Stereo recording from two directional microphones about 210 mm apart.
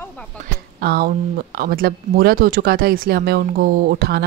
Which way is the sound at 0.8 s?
45° right (ahead or behind).